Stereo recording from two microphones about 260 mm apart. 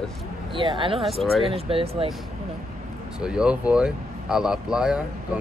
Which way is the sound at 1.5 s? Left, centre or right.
Right.